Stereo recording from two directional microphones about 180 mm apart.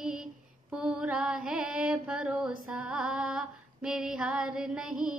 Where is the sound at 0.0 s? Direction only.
5° right (ahead or behind).